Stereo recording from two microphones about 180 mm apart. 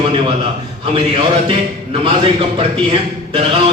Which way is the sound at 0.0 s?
30° right (ahead or behind).